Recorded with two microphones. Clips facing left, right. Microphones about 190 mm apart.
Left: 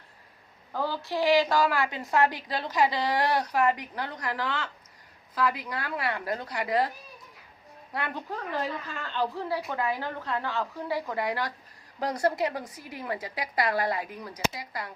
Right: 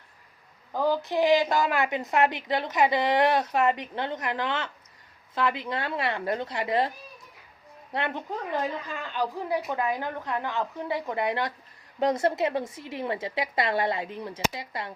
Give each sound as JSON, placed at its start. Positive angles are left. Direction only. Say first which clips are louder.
{"t": 0.7, "sound": "a woman's voice", "louder": "right 5 dB", "side_deg": -15}
{"t": 7.9, "sound": "a woman's voice", "louder": "right 3 dB", "side_deg": -20}